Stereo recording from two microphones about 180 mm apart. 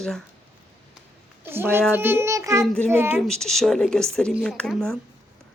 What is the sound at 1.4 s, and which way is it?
A child's voice, 10° right (ahead or behind).